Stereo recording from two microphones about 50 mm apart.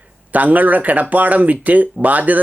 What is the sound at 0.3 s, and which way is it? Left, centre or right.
Speech, right.